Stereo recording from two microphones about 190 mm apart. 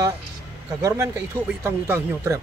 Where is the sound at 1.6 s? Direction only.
15° right (ahead or behind).